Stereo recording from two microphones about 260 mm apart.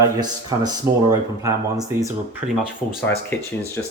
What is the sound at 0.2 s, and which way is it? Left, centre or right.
Speech, centre.